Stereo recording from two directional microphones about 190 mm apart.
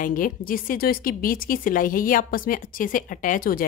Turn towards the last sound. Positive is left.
turn(degrees=45)  # may be behind; listen again after turning